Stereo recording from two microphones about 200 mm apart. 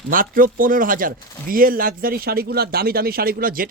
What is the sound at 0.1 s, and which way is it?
Speech, 45° right (ahead or behind).